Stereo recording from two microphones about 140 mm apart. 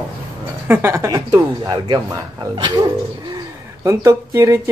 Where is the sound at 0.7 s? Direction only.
20° right (ahead or behind).